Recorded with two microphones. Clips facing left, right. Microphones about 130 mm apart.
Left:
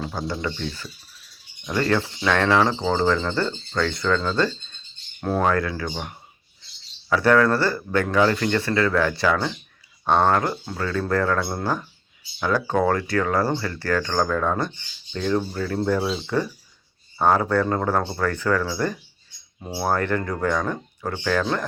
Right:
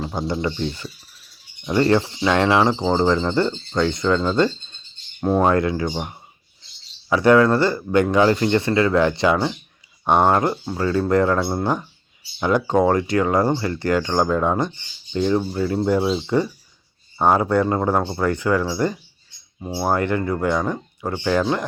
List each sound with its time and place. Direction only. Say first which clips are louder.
0.0 s speech: right 4 dB; 20° right (ahead or behind)